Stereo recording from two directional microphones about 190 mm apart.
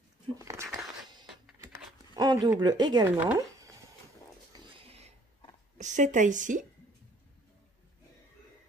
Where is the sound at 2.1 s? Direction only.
20° right (ahead or behind).